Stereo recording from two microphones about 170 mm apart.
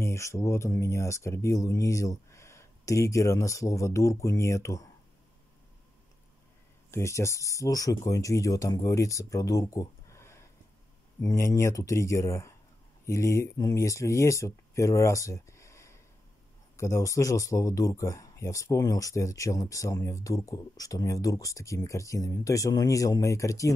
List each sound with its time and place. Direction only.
0.0 s speech: 15° left (ahead or behind)
6.9 s speech: 15° left (ahead or behind)